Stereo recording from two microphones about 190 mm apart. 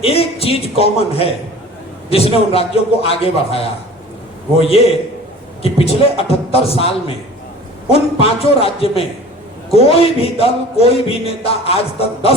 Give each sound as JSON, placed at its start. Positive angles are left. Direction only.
{"t": 0.0, "sound": "a man's voice", "side_deg": 30}